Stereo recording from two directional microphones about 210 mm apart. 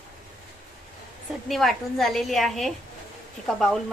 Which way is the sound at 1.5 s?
Centre (ahead or behind).